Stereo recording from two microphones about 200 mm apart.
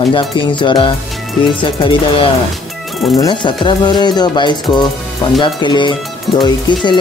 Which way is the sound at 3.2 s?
25° left (ahead or behind).